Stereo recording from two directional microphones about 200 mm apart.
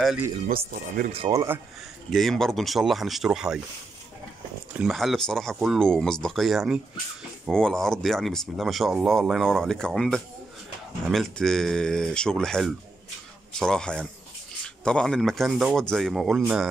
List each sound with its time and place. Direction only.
0.5 s speech: 45° right (ahead or behind)
1.3 s speech: 15° right (ahead or behind)
2.0 s speech: centre (ahead or behind)
4.7 s speech: centre (ahead or behind)